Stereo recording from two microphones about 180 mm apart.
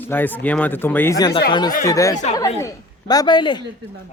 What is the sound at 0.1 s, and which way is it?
A woman's voice, 10° left (ahead or behind).